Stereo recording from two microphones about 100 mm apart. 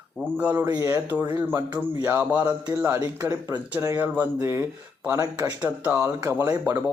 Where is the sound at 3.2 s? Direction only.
35° right (ahead or behind).